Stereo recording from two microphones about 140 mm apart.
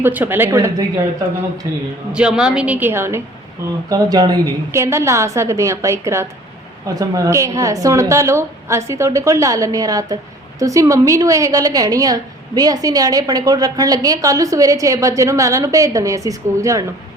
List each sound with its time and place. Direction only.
0.0 s a woman's voice: 15° right (ahead or behind)
2.1 s a woman's voice: 5° right (ahead or behind); by 16.8 s 25° right (ahead or behind)